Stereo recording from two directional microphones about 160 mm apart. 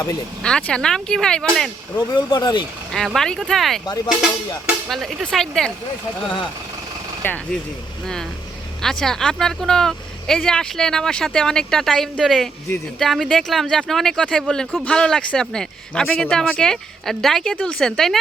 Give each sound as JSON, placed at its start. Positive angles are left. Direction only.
{"t": 0.4, "sound": "speech", "side_deg": 5}
{"t": 2.1, "sound": "speech", "side_deg": 30}
{"t": 2.9, "sound": "speech", "side_deg": 0}
{"t": 3.8, "sound": "speech", "side_deg": 25}
{"t": 4.2, "sound": "speech", "side_deg": -5}
{"t": 7.2, "sound": "speech", "side_deg": 15}
{"t": 8.8, "sound": "speech", "side_deg": 5}